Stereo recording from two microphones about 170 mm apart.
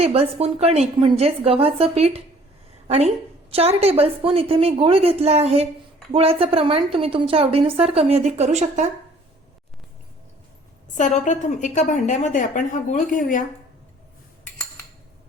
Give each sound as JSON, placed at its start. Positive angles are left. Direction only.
{"t": 0.0, "sound": "a woman's voice", "side_deg": -35}
{"t": 10.9, "sound": "a woman's voice", "side_deg": 45}